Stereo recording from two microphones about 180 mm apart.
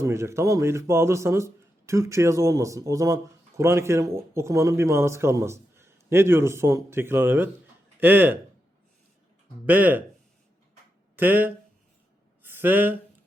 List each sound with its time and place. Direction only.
0.0 s speech: 15° right (ahead or behind)
9.6 s speech: 10° right (ahead or behind)
11.2 s speech: 10° right (ahead or behind)
12.4 s a sound: 10° right (ahead or behind)